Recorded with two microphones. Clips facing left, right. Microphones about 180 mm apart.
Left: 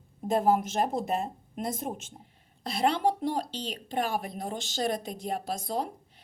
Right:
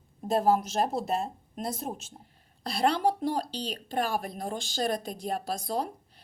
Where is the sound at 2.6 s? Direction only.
20° left (ahead or behind).